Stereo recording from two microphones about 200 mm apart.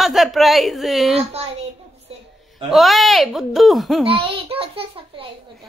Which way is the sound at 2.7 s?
Centre (ahead or behind).